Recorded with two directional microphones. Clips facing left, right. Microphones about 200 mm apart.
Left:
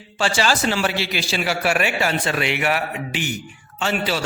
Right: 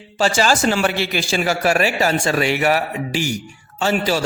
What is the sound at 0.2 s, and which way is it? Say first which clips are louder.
A man's voice: right 4 dB; 45° right (ahead or behind).